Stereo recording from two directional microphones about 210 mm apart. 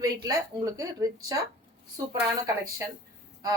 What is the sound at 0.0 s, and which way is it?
Speech, 15° right (ahead or behind).